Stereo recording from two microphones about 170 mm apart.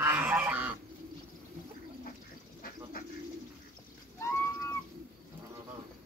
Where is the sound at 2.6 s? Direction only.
60° left (ahead or behind).